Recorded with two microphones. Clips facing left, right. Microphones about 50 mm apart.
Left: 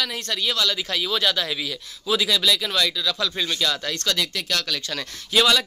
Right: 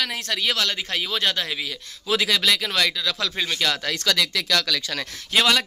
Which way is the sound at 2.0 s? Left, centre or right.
Right.